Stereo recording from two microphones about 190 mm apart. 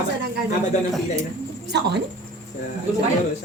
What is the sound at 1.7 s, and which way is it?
Speech, 60° right (ahead or behind).